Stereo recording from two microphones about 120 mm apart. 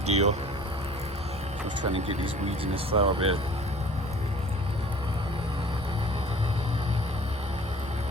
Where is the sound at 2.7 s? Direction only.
50° right (ahead or behind).